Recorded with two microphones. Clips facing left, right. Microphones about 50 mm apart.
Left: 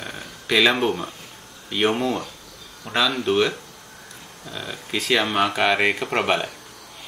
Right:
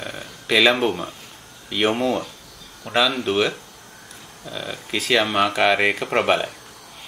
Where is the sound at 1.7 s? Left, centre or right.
Centre.